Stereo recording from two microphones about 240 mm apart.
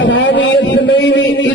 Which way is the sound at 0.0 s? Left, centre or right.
Left.